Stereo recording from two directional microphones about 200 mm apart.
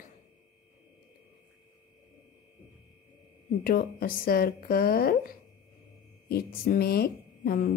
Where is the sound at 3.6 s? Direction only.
45° left (ahead or behind).